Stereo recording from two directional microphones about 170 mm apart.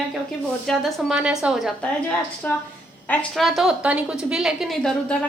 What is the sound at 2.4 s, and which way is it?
A woman's voice, 10° left (ahead or behind).